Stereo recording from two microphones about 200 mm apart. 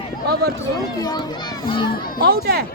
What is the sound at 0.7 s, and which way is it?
Speech, 20° left (ahead or behind).